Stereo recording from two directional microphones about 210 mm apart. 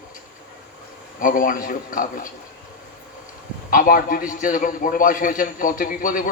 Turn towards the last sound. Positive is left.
turn(degrees=40)  # may be behind; listen again after turning